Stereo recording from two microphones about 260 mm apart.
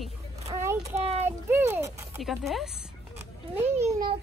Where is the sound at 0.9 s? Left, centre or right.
Right.